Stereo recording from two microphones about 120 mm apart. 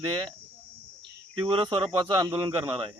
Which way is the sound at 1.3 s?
50° right (ahead or behind).